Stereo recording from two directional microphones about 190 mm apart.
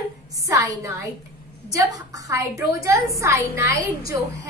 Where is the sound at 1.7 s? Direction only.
20° right (ahead or behind).